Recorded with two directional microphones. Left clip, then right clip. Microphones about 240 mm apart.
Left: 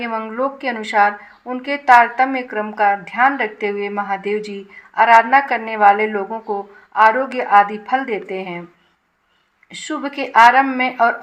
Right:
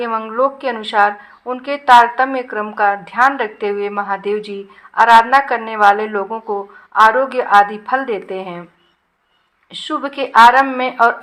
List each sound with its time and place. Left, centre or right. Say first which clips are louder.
0.0 s speech: right 5 dB; right
9.8 s speech: right 3 dB; centre